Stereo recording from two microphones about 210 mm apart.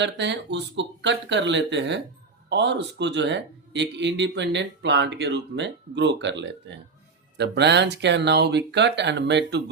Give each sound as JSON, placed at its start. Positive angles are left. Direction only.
{"t": 0.0, "sound": "speech", "side_deg": -55}